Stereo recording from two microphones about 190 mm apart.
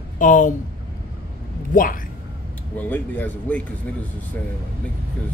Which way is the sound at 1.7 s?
45° left (ahead or behind).